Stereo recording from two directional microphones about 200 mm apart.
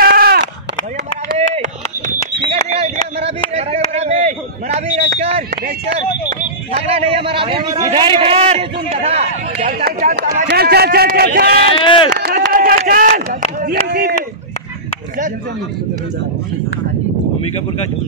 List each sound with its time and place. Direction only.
0.0 s bleat: 50° right (ahead or behind)
2.4 s a sound: 30° right (ahead or behind)
6.7 s a man's voice: 30° right (ahead or behind)
9.8 s speech: 40° right (ahead or behind)
10.4 s a man's voice: 55° right (ahead or behind)
11.8 s run: 25° left (ahead or behind)
12.2 s a sound: 50° right (ahead or behind)
13.8 s a man's voice: 50° right (ahead or behind)